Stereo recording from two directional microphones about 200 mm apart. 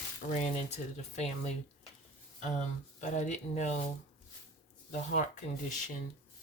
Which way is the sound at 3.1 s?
35° left (ahead or behind).